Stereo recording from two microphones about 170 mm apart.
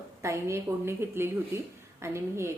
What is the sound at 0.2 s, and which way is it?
A woman's voice, 15° right (ahead or behind).